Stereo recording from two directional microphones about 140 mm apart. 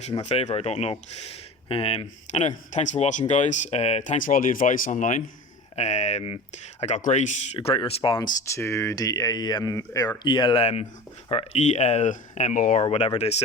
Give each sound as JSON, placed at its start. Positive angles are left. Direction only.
{"t": 0.1, "sound": "speech", "side_deg": 45}
{"t": 5.7, "sound": "speech", "side_deg": 55}
{"t": 7.7, "sound": "speech", "side_deg": 40}
{"t": 8.4, "sound": "speech", "side_deg": 20}
{"t": 10.6, "sound": "speech", "side_deg": 50}
{"t": 12.8, "sound": "speech", "side_deg": 45}